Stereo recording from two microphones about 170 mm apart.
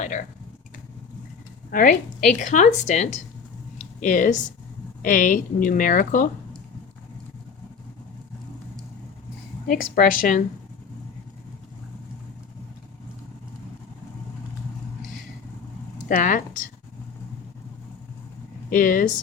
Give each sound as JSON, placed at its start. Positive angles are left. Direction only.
{"t": 0.0, "sound": "speech", "side_deg": 45}
{"t": 1.7, "sound": "a woman's voice", "side_deg": 50}
{"t": 3.8, "sound": "a sound", "side_deg": 50}
{"t": 5.0, "sound": "a woman's voice", "side_deg": 50}
{"t": 9.6, "sound": "a woman's voice", "side_deg": 55}
{"t": 16.0, "sound": "speech", "side_deg": 50}
{"t": 18.7, "sound": "a woman's voice", "side_deg": 50}